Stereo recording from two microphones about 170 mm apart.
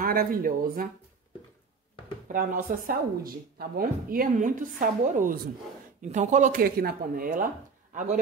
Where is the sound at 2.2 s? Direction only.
55° right (ahead or behind).